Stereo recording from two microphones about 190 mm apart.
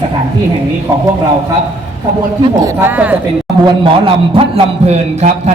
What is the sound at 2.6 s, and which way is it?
Speech, 10° right (ahead or behind).